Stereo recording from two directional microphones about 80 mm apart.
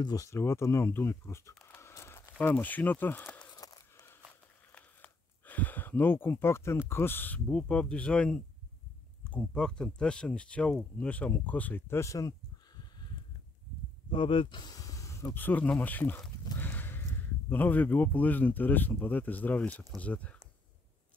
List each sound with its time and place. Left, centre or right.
0.0 s speech: left
0.4 s speech: left
2.3 s speech: centre
3.5 s a sound: left
4.7 s speech: left
12.0 s a sound: left
14.1 s speech: left
14.7 s a sound: left
15.3 s speech: left